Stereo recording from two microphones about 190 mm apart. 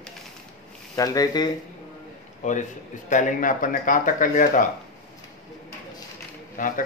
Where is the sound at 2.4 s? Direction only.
40° left (ahead or behind).